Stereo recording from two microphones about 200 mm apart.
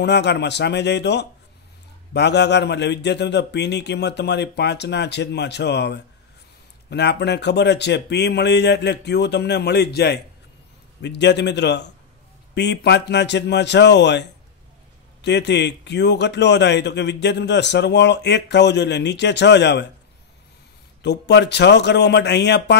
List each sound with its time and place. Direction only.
0.0 s a man's voice: 60° left (ahead or behind)
15.2 s a man's voice: 60° left (ahead or behind)
21.0 s a man's voice: 60° left (ahead or behind)